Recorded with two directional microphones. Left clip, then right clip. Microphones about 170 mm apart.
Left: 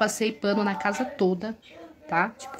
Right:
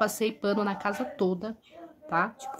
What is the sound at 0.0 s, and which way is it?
Speech, 5° right (ahead or behind).